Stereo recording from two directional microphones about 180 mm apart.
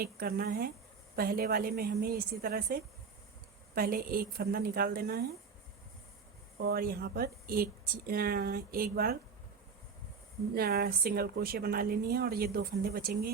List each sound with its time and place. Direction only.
0.0 s speech: 55° right (ahead or behind)
6.6 s speech: 55° right (ahead or behind)
10.5 s speech: 60° right (ahead or behind)